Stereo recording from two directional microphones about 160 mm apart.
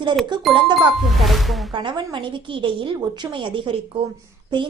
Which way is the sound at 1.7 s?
30° right (ahead or behind).